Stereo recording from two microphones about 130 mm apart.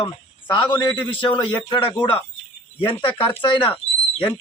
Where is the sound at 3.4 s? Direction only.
40° left (ahead or behind).